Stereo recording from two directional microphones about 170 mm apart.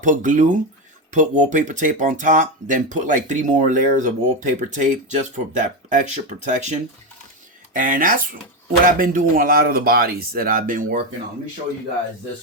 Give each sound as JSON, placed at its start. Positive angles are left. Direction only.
{"t": 0.0, "sound": "speech", "side_deg": -45}